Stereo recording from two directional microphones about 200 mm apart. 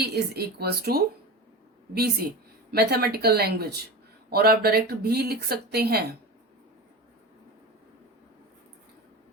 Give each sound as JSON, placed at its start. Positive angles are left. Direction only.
{"t": 0.0, "sound": "speech", "side_deg": -50}
{"t": 2.7, "sound": "speech", "side_deg": -55}